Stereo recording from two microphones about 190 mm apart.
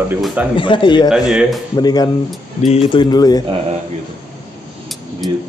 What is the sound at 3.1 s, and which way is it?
Speech, 20° left (ahead or behind).